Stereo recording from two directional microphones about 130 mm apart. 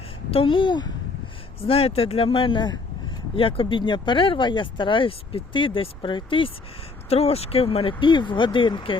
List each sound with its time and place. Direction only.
0.3 s speech: 45° left (ahead or behind)
1.6 s speech: 50° left (ahead or behind)
7.1 s speech: 50° left (ahead or behind)